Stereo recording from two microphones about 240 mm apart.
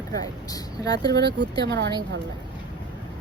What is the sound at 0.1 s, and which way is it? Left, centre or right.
Speech, centre.